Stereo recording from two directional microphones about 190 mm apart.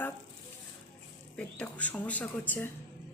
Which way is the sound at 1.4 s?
5° left (ahead or behind).